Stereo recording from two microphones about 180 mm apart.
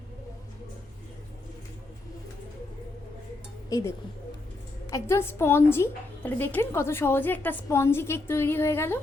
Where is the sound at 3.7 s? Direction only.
20° left (ahead or behind).